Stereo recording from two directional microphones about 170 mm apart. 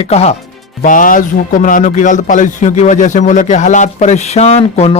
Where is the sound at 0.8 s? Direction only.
50° left (ahead or behind).